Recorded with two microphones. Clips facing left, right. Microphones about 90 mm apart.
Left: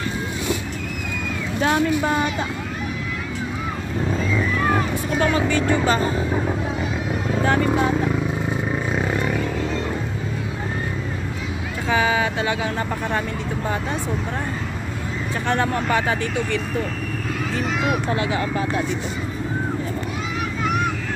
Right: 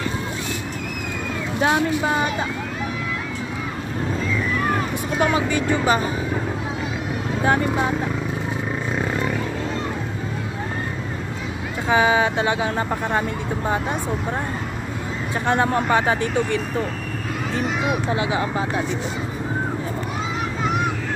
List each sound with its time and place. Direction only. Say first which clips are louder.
1.6 s speech: even; 15° right (ahead or behind)
5.2 s speech: even; 15° right (ahead or behind)
7.4 s speech: even; 15° right (ahead or behind)
8.9 s a sound: right 1 dB; centre (ahead or behind)
11.9 s speech: right 3 dB; 25° right (ahead or behind)
15.4 s speech: right 2 dB; 20° right (ahead or behind)
17.6 s speech: left 1 dB; 15° right (ahead or behind)